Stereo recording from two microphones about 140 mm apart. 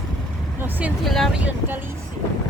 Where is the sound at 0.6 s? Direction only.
10° right (ahead or behind).